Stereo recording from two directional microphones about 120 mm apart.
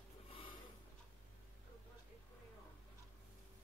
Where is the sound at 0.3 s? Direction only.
50° left (ahead or behind).